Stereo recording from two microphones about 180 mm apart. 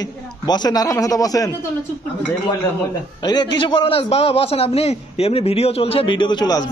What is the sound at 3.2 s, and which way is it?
A man's voice, 25° left (ahead or behind).